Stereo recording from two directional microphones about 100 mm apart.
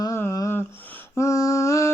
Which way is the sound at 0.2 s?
30° left (ahead or behind).